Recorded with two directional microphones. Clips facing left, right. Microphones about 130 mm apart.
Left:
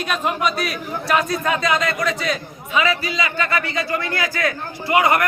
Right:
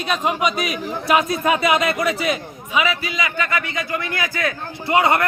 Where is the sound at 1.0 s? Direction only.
20° right (ahead or behind).